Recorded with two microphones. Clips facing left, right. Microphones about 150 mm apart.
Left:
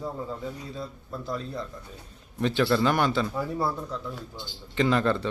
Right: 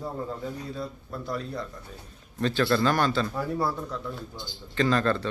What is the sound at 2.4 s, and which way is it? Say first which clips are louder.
Speech: left 1 dB; 15° left (ahead or behind).